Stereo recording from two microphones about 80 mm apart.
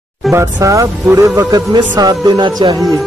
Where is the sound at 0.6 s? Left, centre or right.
Right.